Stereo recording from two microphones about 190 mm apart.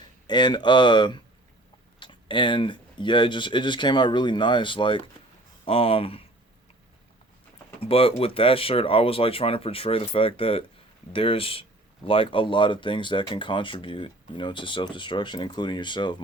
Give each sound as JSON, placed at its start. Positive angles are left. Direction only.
{"t": 0.3, "sound": "speech", "side_deg": 25}
{"t": 7.8, "sound": "speech", "side_deg": 30}